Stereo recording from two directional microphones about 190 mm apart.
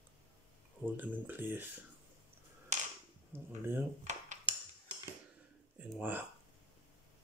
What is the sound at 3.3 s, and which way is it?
Speech, 10° right (ahead or behind).